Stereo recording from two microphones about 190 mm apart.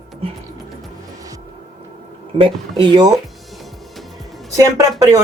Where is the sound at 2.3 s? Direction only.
25° right (ahead or behind).